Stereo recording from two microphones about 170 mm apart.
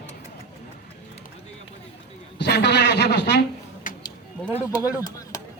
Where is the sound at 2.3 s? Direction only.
85° left.